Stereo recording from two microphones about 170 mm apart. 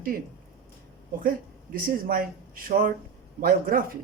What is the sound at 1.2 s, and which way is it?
Speech, 55° right (ahead or behind).